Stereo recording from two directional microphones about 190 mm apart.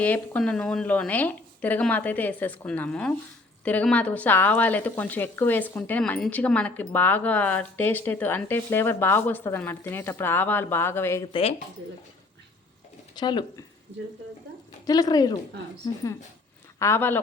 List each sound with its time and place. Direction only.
0.0 s speech: 5° left (ahead or behind)
11.3 s a woman's voice: 30° left (ahead or behind)
13.1 s a woman's voice: 25° left (ahead or behind)
14.8 s a woman's voice: 20° left (ahead or behind)
16.7 s speech: 15° left (ahead or behind)